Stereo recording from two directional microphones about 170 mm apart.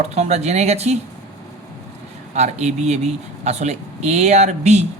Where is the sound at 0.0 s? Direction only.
40° right (ahead or behind).